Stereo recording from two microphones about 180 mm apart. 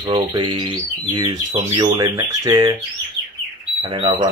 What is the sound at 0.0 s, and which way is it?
Speech, 25° right (ahead or behind).